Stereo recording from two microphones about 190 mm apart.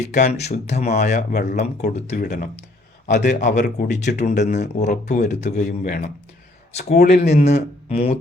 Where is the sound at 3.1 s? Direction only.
60° left (ahead or behind).